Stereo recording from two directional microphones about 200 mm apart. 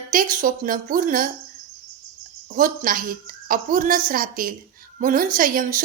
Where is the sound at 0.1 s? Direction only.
40° right (ahead or behind).